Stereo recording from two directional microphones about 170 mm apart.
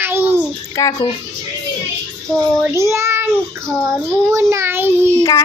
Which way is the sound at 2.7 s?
15° right (ahead or behind).